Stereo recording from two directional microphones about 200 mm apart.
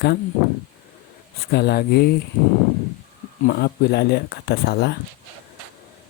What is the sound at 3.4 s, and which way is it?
Speech, 50° left (ahead or behind).